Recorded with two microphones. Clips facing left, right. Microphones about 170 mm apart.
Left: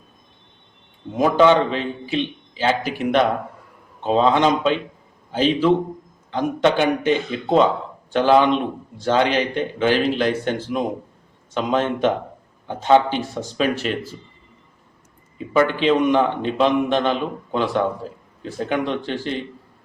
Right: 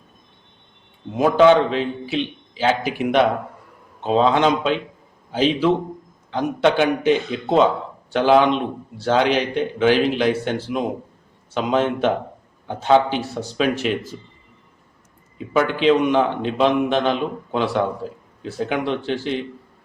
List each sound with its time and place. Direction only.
1.1 s a man's voice: 5° right (ahead or behind)
15.4 s speech: 5° right (ahead or behind)